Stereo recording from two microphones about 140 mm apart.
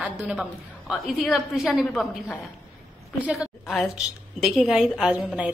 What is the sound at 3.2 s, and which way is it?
A woman's voice, 5° right (ahead or behind).